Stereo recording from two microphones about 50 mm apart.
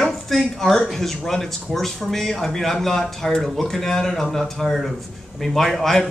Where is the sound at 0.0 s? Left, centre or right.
Centre.